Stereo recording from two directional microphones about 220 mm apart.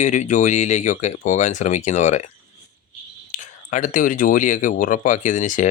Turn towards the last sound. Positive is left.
turn(degrees=35)  # may be behind; listen again after turning